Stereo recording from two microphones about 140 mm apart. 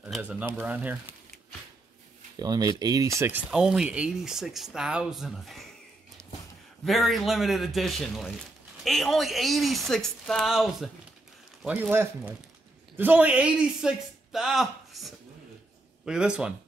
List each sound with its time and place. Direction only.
0.0 s speech: 10° right (ahead or behind)
2.3 s speech: 25° right (ahead or behind)
3.4 s speech: 5° right (ahead or behind)
6.8 s speech: centre (ahead or behind)
11.6 s a man's voice: 10° right (ahead or behind)